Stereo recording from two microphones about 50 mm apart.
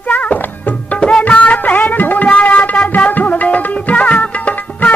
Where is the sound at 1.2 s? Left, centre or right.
Left.